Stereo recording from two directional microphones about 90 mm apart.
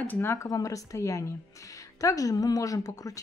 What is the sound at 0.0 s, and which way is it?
Speech, 25° left (ahead or behind).